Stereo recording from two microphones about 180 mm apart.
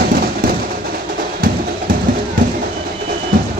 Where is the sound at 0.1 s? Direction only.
55° right (ahead or behind).